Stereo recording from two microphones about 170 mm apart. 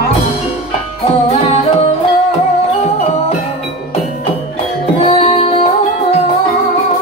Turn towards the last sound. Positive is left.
turn(degrees=35)  # may be behind; listen again after turning